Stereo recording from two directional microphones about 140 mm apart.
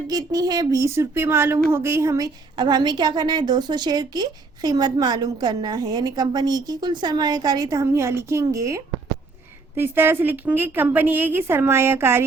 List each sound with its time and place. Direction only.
0.1 s a woman's voice: 25° right (ahead or behind)